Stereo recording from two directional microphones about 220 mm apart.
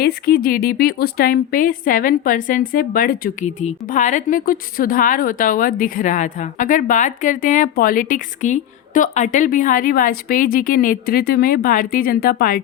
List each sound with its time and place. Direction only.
0.0 s a woman's voice: 45° left (ahead or behind)